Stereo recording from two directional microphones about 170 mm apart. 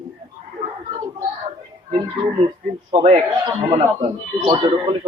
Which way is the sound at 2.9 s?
40° right (ahead or behind).